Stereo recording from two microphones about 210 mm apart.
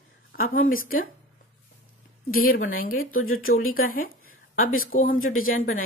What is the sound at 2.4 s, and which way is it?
A woman's voice, 45° left (ahead or behind).